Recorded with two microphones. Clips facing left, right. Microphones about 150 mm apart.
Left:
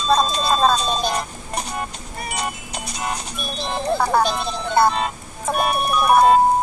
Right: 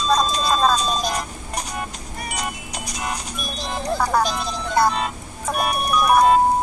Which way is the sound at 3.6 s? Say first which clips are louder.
Left 2 dB; 30° left (ahead or behind).